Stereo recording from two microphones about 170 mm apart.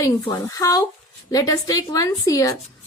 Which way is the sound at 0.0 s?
20° left (ahead or behind).